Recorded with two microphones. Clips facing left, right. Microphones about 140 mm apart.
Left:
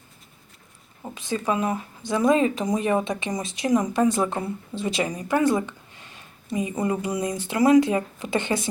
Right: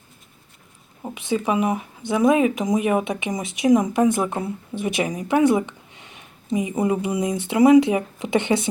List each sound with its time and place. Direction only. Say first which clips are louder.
1.3 s speech: right 3 dB; 15° right (ahead or behind)
4.2 s speech: right 1 dB; 5° right (ahead or behind)